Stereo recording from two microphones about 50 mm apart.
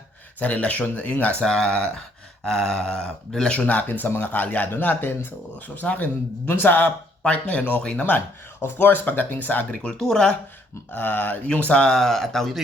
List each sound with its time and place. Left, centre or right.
0.3 s speech: left
1.4 s speech: centre
3.5 s speech: left
3.8 s a man's voice: left
5.6 s a man's voice: left
6.5 s a man's voice: left
7.3 s speech: left
8.6 s speech: left
10.0 s speech: centre
10.9 s a man's voice: left
11.7 s speech: centre